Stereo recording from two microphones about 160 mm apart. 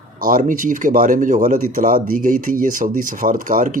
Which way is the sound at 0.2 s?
60° right (ahead or behind).